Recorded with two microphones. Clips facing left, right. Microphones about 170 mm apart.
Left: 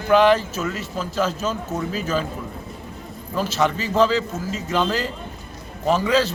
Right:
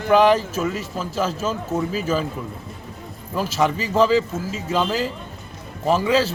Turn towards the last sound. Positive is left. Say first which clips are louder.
# even
turn(degrees=-5)  # may be behind; listen again after turning